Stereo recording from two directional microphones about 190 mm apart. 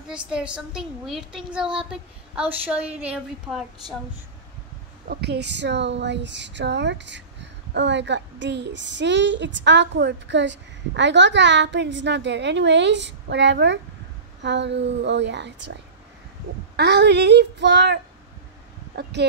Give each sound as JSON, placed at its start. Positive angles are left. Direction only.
{"t": 0.1, "sound": "a woman's voice", "side_deg": -5}
{"t": 5.0, "sound": "a woman's voice", "side_deg": -55}